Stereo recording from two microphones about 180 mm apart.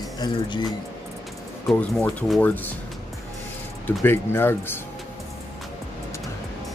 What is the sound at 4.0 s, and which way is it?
Speech, 10° left (ahead or behind).